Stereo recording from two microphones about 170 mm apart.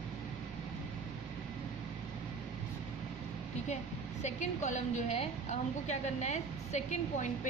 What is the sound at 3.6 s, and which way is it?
A woman's voice, 45° left (ahead or behind).